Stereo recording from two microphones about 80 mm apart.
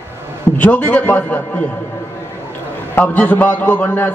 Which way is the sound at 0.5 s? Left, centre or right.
Left.